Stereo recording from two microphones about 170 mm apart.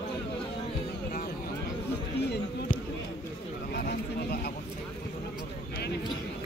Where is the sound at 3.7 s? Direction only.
70° left (ahead or behind).